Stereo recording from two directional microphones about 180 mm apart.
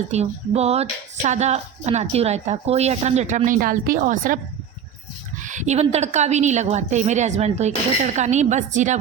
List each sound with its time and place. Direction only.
0.1 s speech: 35° right (ahead or behind)
5.4 s speech: 45° right (ahead or behind)